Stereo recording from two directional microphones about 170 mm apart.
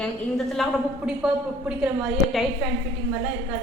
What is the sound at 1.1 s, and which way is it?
A woman's voice, 5° right (ahead or behind).